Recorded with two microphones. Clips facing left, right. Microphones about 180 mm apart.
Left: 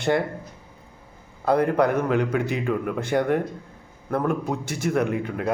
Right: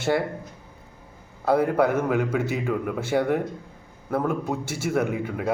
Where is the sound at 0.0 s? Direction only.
5° right (ahead or behind).